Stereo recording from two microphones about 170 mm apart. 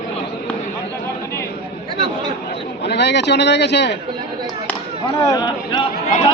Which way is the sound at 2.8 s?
85° left.